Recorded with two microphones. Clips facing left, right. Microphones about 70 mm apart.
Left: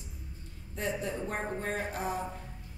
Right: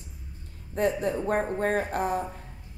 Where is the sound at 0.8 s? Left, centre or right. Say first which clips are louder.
Right 8 dB; right.